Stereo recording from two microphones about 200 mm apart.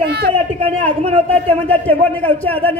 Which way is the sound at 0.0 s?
55° right (ahead or behind).